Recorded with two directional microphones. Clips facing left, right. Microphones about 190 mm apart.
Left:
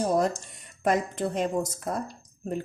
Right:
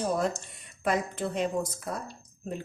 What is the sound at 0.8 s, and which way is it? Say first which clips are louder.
Speech: left 3 dB; 45° left (ahead or behind).